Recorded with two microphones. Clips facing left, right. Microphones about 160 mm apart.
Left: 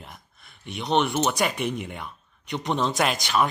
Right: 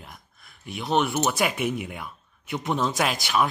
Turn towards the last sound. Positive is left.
turn(degrees=-5)  # may be behind; listen again after turning